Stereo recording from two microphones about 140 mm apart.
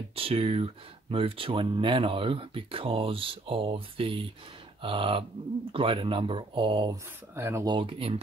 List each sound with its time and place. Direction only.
0.1 s speech: 45° right (ahead or behind)
6.9 s speech: 20° right (ahead or behind)
7.6 s speech: 35° right (ahead or behind)